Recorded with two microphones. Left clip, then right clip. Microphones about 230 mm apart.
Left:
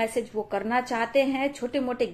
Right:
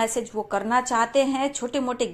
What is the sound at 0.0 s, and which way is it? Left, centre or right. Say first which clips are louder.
A woman's voice: right 2 dB; centre.